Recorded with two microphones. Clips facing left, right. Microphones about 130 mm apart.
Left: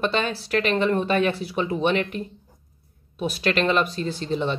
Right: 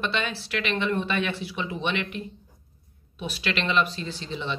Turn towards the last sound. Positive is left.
turn(degrees=45)  # may be behind; listen again after turning